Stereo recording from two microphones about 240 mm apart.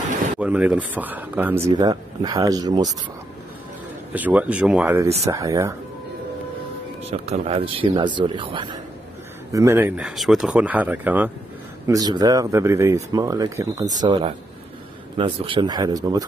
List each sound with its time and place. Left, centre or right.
0.4 s speech: centre
4.1 s speech: centre
7.0 s speech: right